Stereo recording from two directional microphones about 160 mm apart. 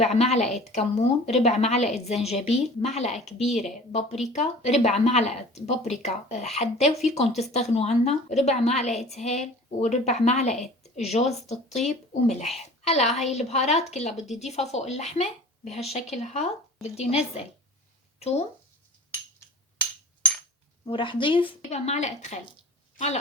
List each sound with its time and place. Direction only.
0.0 s a woman's voice: 40° left (ahead or behind)
20.8 s a woman's voice: 30° left (ahead or behind)